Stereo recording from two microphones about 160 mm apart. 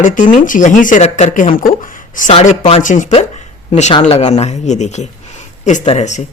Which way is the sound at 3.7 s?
40° left (ahead or behind).